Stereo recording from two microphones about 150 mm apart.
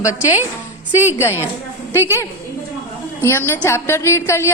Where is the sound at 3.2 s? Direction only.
15° left (ahead or behind).